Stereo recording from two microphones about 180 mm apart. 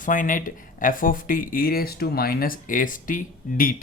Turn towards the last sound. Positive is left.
turn(degrees=50)  # may be behind; listen again after turning